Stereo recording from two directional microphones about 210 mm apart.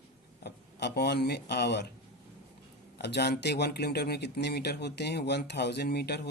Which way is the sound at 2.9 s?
50° left (ahead or behind).